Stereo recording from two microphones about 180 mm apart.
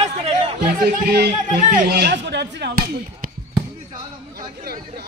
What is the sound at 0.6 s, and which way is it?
Chatter, 60° right (ahead or behind).